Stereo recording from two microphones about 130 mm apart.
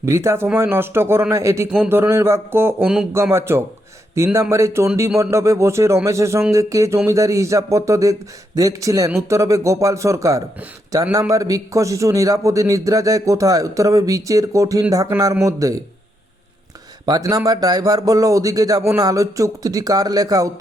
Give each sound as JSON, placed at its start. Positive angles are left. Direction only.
{"t": 0.0, "sound": "a man's voice", "side_deg": -20}
{"t": 17.1, "sound": "a man's voice", "side_deg": -30}